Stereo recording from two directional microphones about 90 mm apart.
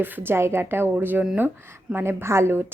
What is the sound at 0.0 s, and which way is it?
A woman's voice, 25° right (ahead or behind).